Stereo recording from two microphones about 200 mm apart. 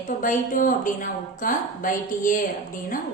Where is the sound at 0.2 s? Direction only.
45° left (ahead or behind).